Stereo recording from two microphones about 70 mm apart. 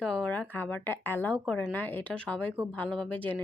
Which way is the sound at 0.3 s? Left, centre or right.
Left.